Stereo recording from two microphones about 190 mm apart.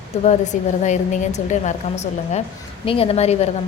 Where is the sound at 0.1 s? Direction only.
40° left (ahead or behind).